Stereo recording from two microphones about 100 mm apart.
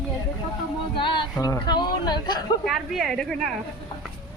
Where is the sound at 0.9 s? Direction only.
55° left (ahead or behind).